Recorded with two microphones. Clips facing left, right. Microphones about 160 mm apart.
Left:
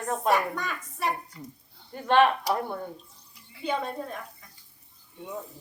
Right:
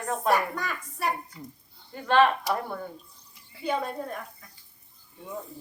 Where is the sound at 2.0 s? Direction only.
20° left (ahead or behind).